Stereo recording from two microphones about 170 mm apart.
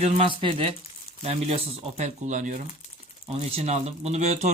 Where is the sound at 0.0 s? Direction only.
35° right (ahead or behind).